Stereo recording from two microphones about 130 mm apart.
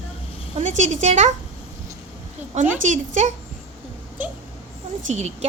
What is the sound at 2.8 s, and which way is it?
Speech, 70° right (ahead or behind).